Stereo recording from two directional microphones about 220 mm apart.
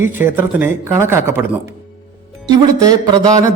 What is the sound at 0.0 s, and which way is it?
Speech, 10° right (ahead or behind).